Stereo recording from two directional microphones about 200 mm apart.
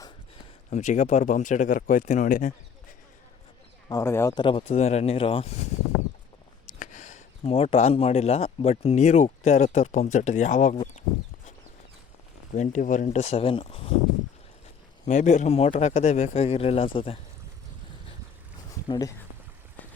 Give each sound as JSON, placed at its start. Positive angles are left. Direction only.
{"t": 0.7, "sound": "speech", "side_deg": 35}
{"t": 3.8, "sound": "speech", "side_deg": 15}
{"t": 6.7, "sound": "speech", "side_deg": 40}
{"t": 12.5, "sound": "speech", "side_deg": 35}
{"t": 15.0, "sound": "speech", "side_deg": 35}
{"t": 18.9, "sound": "speech", "side_deg": 20}